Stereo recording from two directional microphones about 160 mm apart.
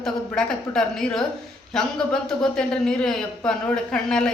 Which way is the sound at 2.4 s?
5° left (ahead or behind).